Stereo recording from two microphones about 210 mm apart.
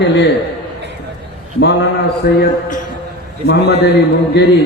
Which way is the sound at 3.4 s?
55° left (ahead or behind).